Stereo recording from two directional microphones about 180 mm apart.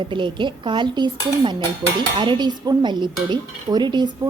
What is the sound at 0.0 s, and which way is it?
A woman's voice, 25° right (ahead or behind).